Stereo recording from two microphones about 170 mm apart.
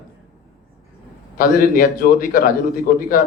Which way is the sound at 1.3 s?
55° left (ahead or behind).